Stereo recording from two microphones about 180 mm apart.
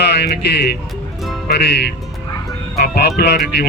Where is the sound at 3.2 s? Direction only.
60° left (ahead or behind).